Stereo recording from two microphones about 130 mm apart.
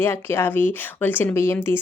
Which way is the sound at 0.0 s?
20° left (ahead or behind).